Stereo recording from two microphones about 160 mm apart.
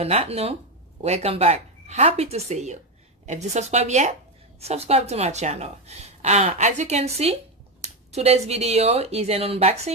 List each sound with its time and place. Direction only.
0.0 s a woman's voice: 40° right (ahead or behind)